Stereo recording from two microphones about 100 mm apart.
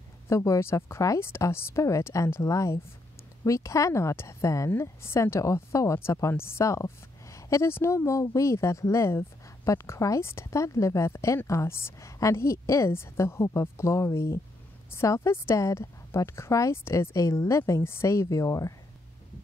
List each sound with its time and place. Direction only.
0.3 s a woman's voice: 30° left (ahead or behind)